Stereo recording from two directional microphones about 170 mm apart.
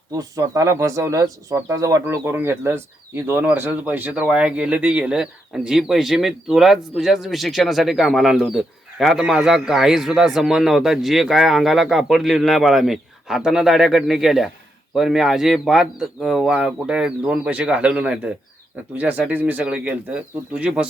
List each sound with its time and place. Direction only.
0.1 s speech: 20° right (ahead or behind)